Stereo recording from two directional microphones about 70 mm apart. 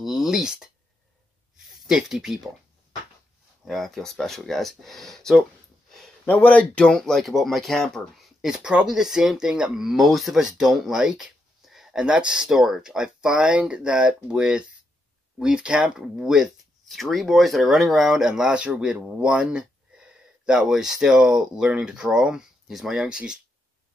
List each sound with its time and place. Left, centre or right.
0.0 s speech: centre
1.7 s speech: centre
3.6 s speech: centre
6.2 s a man's voice: left
6.9 s speech: centre
16.8 s speech: centre